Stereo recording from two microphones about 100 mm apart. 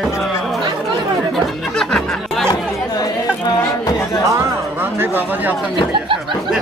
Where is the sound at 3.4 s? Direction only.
35° left (ahead or behind).